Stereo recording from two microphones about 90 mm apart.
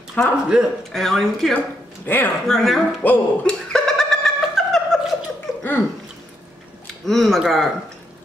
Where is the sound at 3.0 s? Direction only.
20° left (ahead or behind).